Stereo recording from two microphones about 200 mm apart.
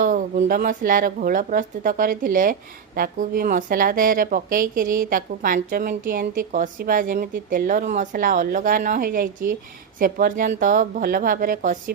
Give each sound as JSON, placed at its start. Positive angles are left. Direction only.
{"t": 0.0, "sound": "speech", "side_deg": -40}